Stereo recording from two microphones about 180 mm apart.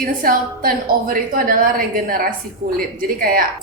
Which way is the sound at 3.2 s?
50° right (ahead or behind).